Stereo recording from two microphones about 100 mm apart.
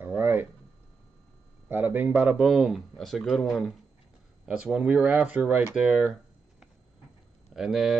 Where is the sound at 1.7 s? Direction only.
20° right (ahead or behind).